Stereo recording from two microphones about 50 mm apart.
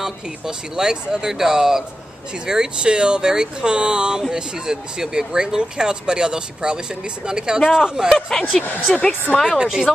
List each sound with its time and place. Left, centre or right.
0.0 s speech: centre
8.1 s speech: centre
9.6 s speech: centre